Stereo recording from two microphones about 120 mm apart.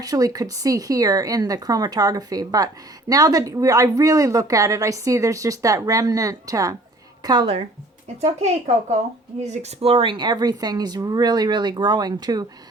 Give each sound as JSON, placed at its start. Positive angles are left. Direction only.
{"t": 0.0, "sound": "a woman's voice", "side_deg": -30}
{"t": 8.0, "sound": "speech", "side_deg": -65}